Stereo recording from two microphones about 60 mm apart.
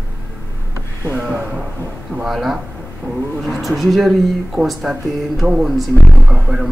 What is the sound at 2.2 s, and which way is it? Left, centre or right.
Speech, centre.